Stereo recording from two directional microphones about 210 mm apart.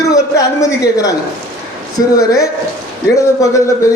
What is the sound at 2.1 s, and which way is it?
Speech, 15° left (ahead or behind).